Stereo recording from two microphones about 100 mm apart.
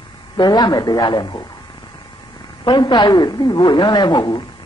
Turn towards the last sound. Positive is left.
turn(degrees=45)  # may be behind; listen again after turning